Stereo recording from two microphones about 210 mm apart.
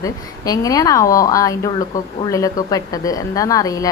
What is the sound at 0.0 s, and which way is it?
A woman's voice, 15° left (ahead or behind).